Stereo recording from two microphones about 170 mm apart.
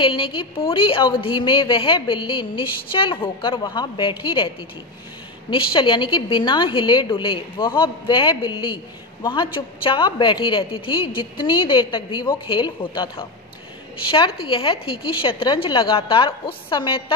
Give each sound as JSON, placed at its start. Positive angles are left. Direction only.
{"t": 0.0, "sound": "a woman's voice", "side_deg": 30}